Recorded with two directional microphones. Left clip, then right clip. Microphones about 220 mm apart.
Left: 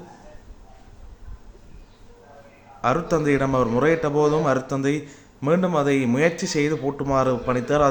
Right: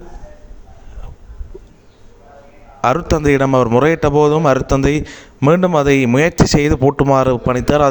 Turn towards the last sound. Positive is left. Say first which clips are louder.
# right 6 dB
turn(degrees=-45)  # may be behind; listen again after turning